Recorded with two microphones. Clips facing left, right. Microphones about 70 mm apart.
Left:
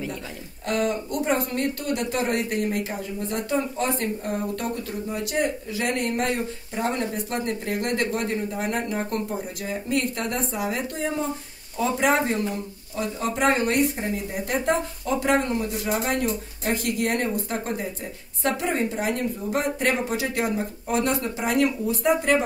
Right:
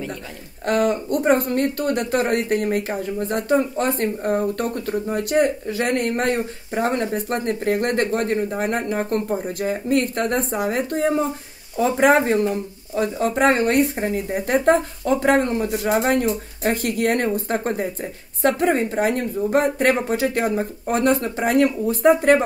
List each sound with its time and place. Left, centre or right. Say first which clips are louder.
0.7 s speech: right 5 dB; right